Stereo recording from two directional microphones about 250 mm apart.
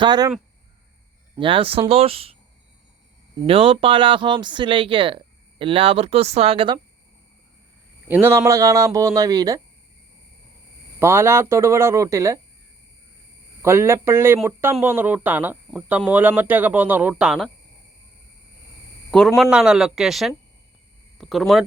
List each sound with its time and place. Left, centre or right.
0.0 s speech: centre
1.4 s speech: right
3.4 s speech: right
8.0 s speech: centre
11.0 s speech: centre
13.6 s speech: centre
19.1 s speech: centre